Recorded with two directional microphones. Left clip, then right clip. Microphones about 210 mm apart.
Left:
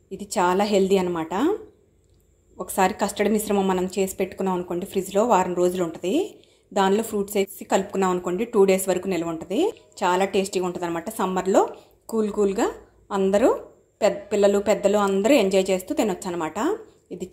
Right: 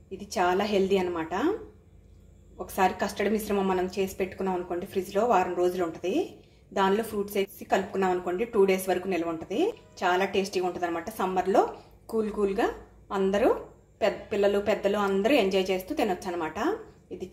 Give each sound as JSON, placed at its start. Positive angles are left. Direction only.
{"t": 0.2, "sound": "speech", "side_deg": 40}
{"t": 2.5, "sound": "speech", "side_deg": 40}